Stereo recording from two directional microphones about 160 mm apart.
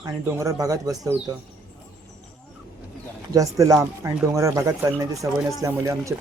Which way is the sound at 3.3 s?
20° right (ahead or behind).